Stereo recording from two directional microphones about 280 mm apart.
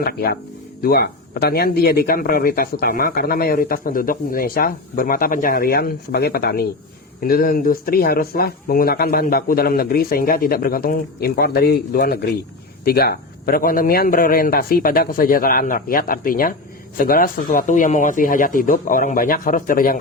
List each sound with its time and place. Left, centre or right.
0.0 s a man's voice: left